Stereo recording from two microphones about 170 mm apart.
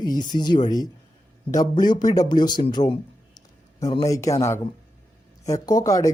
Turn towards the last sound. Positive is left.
turn(degrees=20)  # may be behind; listen again after turning